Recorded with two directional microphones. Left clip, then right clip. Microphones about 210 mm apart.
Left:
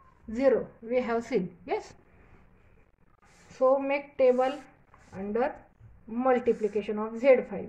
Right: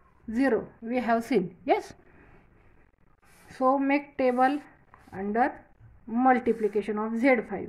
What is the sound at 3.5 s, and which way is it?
Speech, 50° right (ahead or behind).